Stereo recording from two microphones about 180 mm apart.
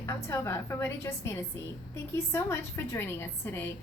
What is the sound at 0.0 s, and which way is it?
A woman's voice, 15° left (ahead or behind).